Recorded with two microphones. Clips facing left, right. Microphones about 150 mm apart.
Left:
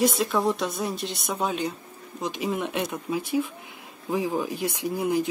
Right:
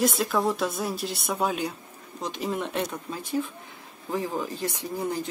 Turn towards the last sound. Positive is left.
turn(degrees=10)  # may be behind; listen again after turning